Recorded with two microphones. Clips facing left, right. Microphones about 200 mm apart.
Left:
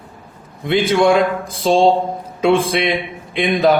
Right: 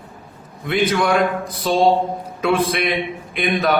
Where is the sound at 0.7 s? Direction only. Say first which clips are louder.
Left 4 dB; 25° left (ahead or behind).